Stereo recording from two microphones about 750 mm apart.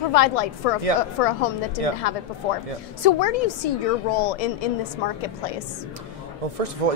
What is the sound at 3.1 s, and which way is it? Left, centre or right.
A woman's voice, left.